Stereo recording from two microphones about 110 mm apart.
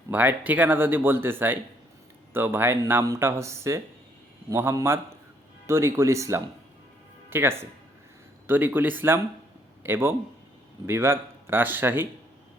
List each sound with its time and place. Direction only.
0.1 s speech: 15° right (ahead or behind)
3.0 s speech: 35° right (ahead or behind)